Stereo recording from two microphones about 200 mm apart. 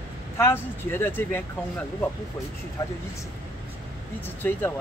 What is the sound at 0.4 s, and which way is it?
Speech, 10° left (ahead or behind).